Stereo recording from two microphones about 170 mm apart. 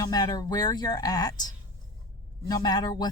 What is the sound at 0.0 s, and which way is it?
Speech, 20° left (ahead or behind).